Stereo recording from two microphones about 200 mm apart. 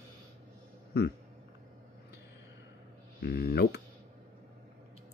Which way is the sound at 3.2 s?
55° left (ahead or behind).